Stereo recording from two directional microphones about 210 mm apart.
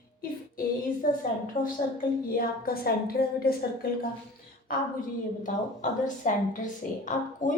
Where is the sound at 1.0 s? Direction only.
45° left (ahead or behind).